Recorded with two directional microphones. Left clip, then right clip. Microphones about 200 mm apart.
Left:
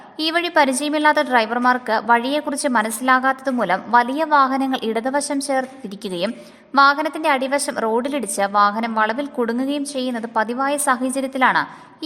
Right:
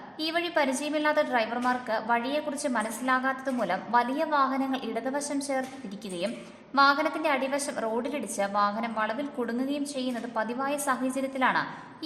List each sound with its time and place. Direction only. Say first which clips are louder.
0.2 s a woman's voice: left 10 dB; 45° left (ahead or behind)
6.7 s a woman's voice: left 8 dB; 45° left (ahead or behind)